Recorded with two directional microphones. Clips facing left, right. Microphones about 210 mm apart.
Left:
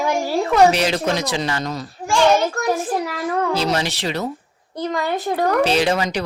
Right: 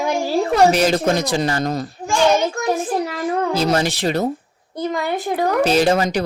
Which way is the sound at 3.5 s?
45° right (ahead or behind).